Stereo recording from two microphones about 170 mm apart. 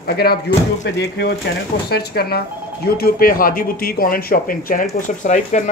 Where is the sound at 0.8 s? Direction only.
80° left.